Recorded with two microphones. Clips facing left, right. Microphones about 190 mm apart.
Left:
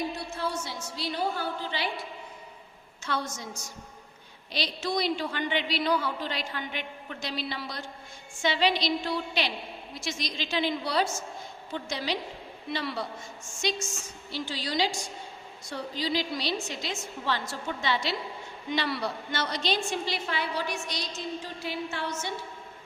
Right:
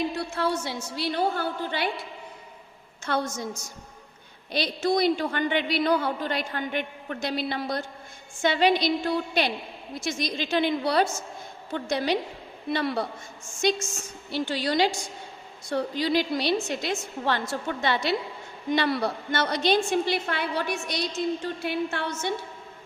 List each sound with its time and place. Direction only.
0.3 s a woman's voice: 70° right (ahead or behind)
3.1 s a woman's voice: 55° right (ahead or behind)
4.5 s a woman's voice: 50° right (ahead or behind)